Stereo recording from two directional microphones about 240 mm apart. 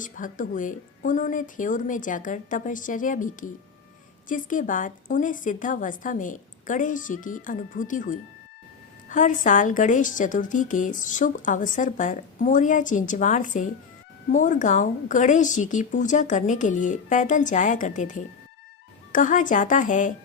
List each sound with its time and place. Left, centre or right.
0.0 s a woman's voice: left